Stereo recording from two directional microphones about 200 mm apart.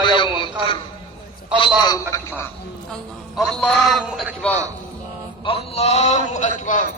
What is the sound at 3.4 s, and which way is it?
A man's voice, 5° left (ahead or behind).